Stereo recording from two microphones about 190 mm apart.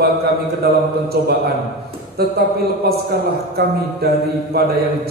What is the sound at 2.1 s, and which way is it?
A man's voice, 55° right (ahead or behind).